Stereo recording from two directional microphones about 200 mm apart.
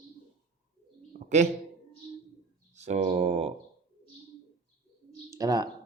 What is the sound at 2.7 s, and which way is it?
Speech, 35° right (ahead or behind).